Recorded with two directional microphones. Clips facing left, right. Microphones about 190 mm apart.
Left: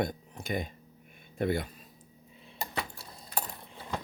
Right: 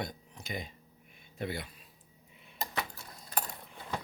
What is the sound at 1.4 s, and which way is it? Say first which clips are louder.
Speech: left 8 dB; 50° left (ahead or behind).